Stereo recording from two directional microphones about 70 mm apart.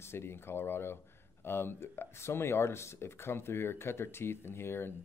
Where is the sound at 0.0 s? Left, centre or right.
Left.